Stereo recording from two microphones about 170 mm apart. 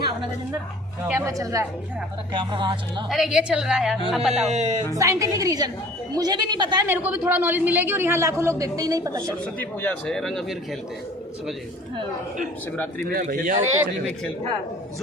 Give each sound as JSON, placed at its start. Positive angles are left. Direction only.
{"t": 1.0, "sound": "a man's voice", "side_deg": -15}
{"t": 3.1, "sound": "a man's voice", "side_deg": 0}
{"t": 4.4, "sound": "speech", "side_deg": -45}
{"t": 4.9, "sound": "a woman's voice", "side_deg": -20}
{"t": 6.8, "sound": "a man's voice", "side_deg": -10}
{"t": 9.4, "sound": "a man's voice", "side_deg": 10}
{"t": 13.1, "sound": "speech", "side_deg": -60}